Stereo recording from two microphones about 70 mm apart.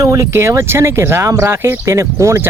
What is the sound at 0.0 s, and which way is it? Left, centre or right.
Speech, right.